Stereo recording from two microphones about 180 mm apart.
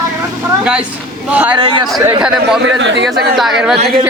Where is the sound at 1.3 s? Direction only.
10° right (ahead or behind).